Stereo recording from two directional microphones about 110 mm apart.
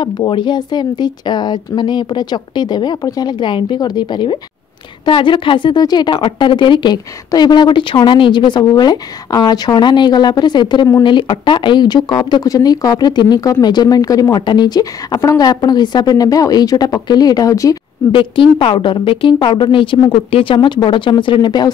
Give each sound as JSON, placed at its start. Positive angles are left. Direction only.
{"t": 0.0, "sound": "speech", "side_deg": 45}
{"t": 18.1, "sound": "speech", "side_deg": 50}